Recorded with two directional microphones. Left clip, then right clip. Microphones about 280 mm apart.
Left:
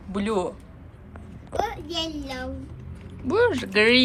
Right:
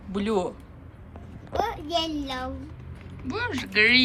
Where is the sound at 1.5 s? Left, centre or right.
Centre.